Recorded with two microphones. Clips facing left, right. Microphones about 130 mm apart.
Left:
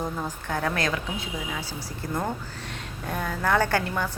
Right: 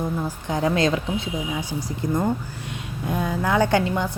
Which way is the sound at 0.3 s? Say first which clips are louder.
Right 5 dB; 15° right (ahead or behind).